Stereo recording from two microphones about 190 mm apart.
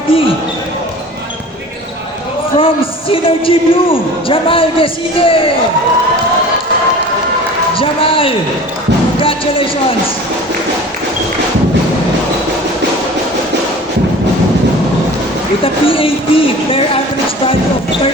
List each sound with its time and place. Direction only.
0.1 s basketball bounce: 30° left (ahead or behind)
2.6 s a man's voice: 30° left (ahead or behind)
7.8 s a man's voice: 30° left (ahead or behind)
15.6 s a man's voice: 30° left (ahead or behind)